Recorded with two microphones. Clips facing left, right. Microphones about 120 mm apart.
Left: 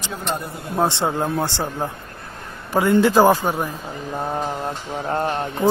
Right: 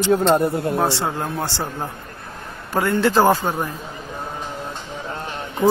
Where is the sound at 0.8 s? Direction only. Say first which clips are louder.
Left 1 dB; 20° left (ahead or behind).